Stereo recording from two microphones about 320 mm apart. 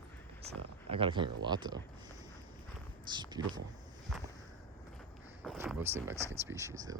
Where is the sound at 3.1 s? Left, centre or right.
Centre.